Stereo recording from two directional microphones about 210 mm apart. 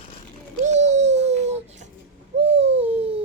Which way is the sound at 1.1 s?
30° right (ahead or behind).